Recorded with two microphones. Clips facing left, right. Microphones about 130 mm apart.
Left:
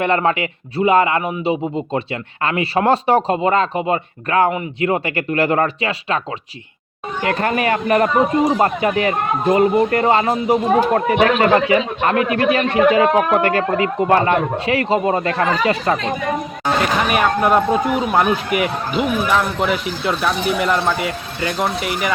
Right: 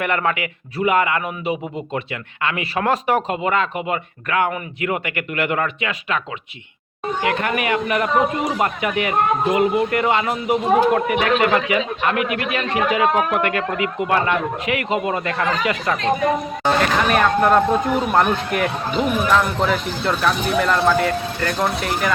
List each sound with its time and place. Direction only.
0.0 s speech: 30° left (ahead or behind)
7.3 s speech: 35° left (ahead or behind)
17.1 s speech: 10° left (ahead or behind)